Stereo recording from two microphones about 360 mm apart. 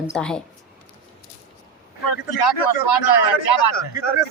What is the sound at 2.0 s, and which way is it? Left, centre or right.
A man's voice, left.